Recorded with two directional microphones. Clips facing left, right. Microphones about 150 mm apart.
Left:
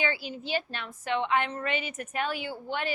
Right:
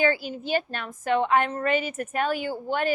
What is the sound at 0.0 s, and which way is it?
A woman's voice, 45° right (ahead or behind).